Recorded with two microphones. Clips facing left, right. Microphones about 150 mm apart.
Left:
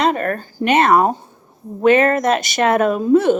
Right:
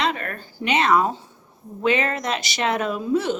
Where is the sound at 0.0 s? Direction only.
45° left (ahead or behind).